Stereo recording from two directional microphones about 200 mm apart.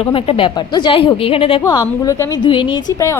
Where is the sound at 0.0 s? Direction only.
25° left (ahead or behind).